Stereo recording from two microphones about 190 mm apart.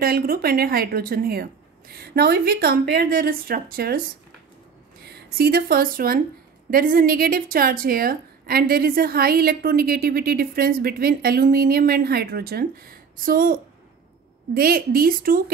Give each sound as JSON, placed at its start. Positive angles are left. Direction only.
{"t": 0.0, "sound": "a woman's voice", "side_deg": -50}
{"t": 5.0, "sound": "a woman's voice", "side_deg": -55}